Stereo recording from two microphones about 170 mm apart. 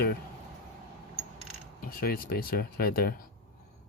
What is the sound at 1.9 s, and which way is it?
Speech, 60° left (ahead or behind).